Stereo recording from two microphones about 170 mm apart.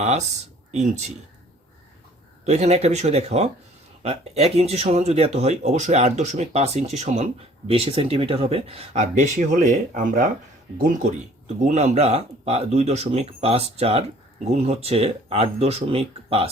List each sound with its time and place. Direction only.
0.0 s speech: 40° right (ahead or behind)
2.5 s speech: 40° right (ahead or behind)